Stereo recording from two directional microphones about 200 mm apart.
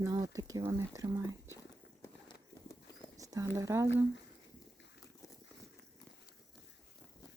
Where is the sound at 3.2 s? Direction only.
15° right (ahead or behind).